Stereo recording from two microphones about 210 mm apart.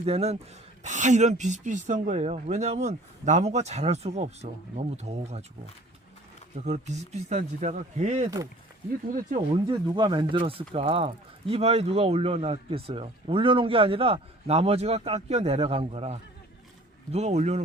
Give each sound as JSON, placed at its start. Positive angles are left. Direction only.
{"t": 0.0, "sound": "speech", "side_deg": -30}
{"t": 6.7, "sound": "speech", "side_deg": -35}
{"t": 9.6, "sound": "speech", "side_deg": -20}